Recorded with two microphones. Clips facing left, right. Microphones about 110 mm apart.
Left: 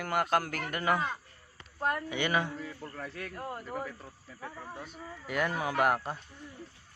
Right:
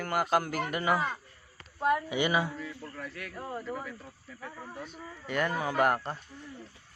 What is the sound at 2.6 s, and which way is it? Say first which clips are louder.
Speech: even; 35° left (ahead or behind).